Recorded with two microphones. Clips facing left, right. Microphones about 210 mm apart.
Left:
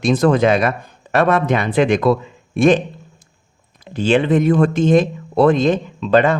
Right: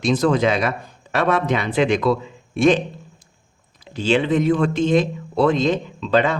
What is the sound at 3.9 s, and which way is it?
Speech, 55° left (ahead or behind).